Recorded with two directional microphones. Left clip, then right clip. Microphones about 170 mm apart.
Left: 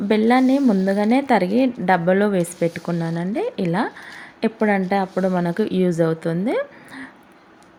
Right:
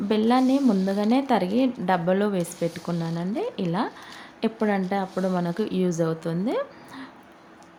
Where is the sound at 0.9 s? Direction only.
20° left (ahead or behind).